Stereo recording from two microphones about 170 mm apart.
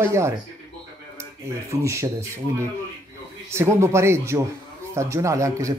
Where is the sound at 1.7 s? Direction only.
15° right (ahead or behind).